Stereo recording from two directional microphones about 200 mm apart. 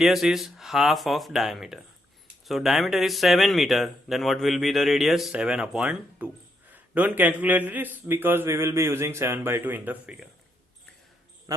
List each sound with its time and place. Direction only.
0.0 s a man's voice: centre (ahead or behind)
11.5 s speech: 15° right (ahead or behind)